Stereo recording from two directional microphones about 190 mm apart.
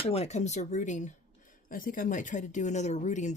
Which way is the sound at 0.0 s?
30° left (ahead or behind).